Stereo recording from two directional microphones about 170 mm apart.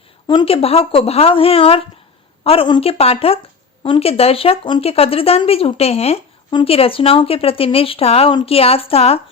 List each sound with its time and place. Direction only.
0.3 s speech: 30° left (ahead or behind)